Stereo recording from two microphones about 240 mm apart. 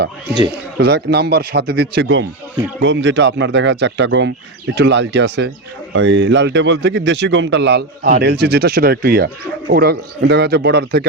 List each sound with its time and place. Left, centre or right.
0.5 s a man's voice: right